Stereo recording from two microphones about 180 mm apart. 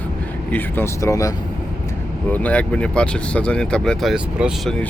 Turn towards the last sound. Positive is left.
turn(degrees=0)  # may be behind; listen again after turning